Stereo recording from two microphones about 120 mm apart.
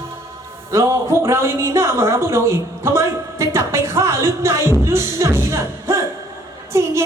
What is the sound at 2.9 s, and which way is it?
Music, 20° right (ahead or behind).